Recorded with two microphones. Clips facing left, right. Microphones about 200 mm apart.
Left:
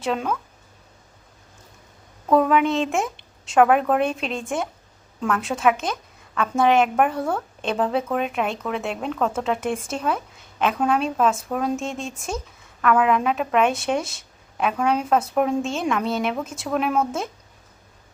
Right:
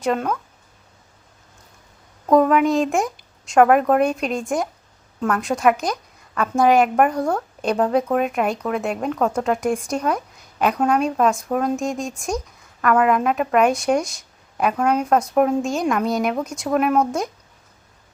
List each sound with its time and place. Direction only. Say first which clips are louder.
0.0 s a woman's voice: right 3 dB; centre (ahead or behind)
2.3 s a woman's voice: right 3 dB; 5° right (ahead or behind)
4.1 s speech: right 4 dB; 40° right (ahead or behind)
4.4 s a woman's voice: right 3 dB; centre (ahead or behind)
11.9 s speech: right 4 dB; 40° right (ahead or behind)
12.8 s a woman's voice: right 2 dB; centre (ahead or behind)